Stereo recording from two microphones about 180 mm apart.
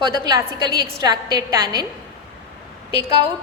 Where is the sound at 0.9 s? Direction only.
20° right (ahead or behind).